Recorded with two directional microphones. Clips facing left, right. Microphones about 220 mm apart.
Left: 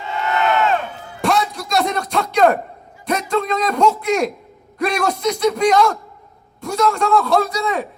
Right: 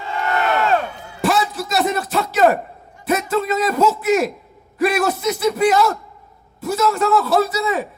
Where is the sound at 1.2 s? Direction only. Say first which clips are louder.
Even; 5° right (ahead or behind).